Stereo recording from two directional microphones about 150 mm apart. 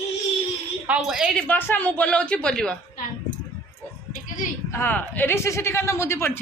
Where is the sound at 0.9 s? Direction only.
5° right (ahead or behind).